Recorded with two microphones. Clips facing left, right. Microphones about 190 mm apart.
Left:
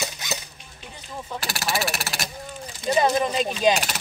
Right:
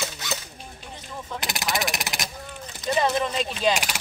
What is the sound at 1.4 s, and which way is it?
Speech, 20° right (ahead or behind).